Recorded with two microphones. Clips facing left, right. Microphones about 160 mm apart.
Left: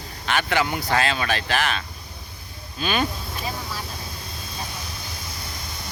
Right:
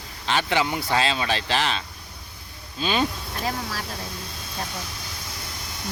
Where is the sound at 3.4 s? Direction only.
90° right.